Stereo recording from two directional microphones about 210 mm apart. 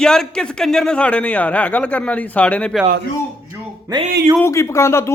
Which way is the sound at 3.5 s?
20° right (ahead or behind).